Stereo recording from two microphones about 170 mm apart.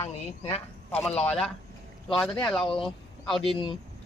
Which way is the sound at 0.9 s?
5° left (ahead or behind).